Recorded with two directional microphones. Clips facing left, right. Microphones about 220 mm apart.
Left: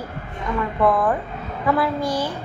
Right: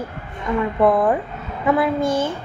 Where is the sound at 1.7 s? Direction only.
20° right (ahead or behind).